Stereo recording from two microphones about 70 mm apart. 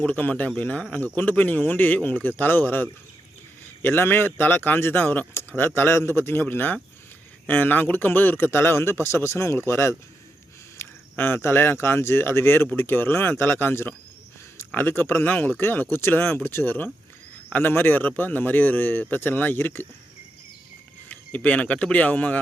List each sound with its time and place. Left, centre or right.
0.0 s a man's voice: left
21.1 s speech: left